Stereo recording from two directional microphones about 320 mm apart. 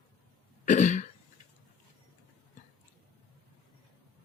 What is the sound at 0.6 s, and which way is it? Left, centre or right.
Cough, left.